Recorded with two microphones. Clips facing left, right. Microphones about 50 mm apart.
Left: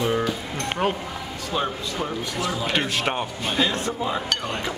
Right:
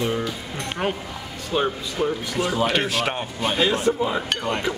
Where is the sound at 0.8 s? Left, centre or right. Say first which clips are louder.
Left 1 dB; centre.